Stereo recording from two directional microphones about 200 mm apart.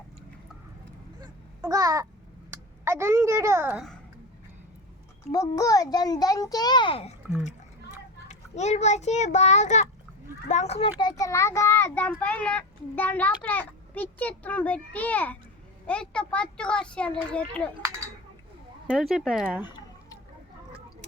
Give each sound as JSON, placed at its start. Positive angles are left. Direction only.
{"t": 1.2, "sound": "babbling", "side_deg": -15}
{"t": 2.5, "sound": "a child's voice", "side_deg": -15}
{"t": 5.3, "sound": "a child's voice", "side_deg": 15}
{"t": 8.3, "sound": "a child's voice", "side_deg": 35}
{"t": 11.1, "sound": "a child's voice", "side_deg": 15}
{"t": 18.9, "sound": "a child's voice", "side_deg": -5}